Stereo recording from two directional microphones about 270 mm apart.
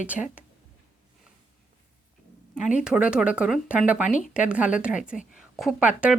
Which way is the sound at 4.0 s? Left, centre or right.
Left.